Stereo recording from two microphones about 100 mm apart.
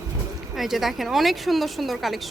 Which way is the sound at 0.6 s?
5° right (ahead or behind).